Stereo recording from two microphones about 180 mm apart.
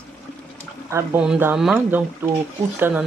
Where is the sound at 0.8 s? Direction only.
15° right (ahead or behind).